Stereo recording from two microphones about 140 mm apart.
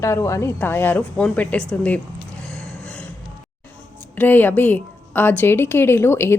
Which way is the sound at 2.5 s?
10° left (ahead or behind).